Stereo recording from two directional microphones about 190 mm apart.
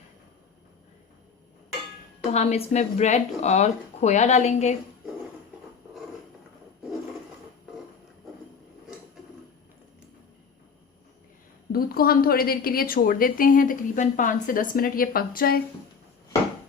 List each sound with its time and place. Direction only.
2.3 s speech: 35° left (ahead or behind)
11.7 s a woman's voice: 50° left (ahead or behind)